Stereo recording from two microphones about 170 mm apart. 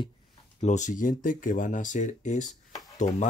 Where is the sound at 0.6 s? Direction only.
45° left (ahead or behind).